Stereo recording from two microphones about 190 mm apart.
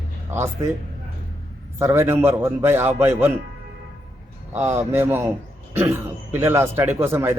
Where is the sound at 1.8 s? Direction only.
15° right (ahead or behind).